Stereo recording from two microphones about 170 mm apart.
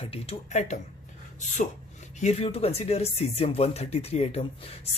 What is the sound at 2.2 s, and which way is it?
Speech, 40° left (ahead or behind).